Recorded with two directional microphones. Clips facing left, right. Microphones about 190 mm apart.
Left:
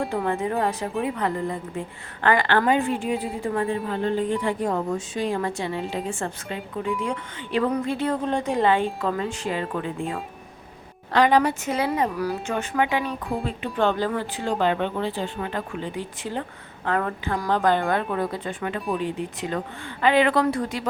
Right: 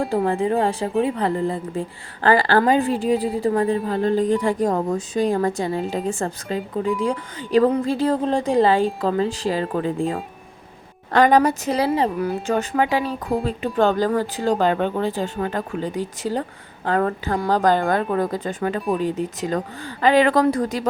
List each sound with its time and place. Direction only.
0.1 s speech: 30° right (ahead or behind)
11.1 s speech: 45° right (ahead or behind); by 12.4 s 20° right (ahead or behind)
12.5 s speech: 35° right (ahead or behind)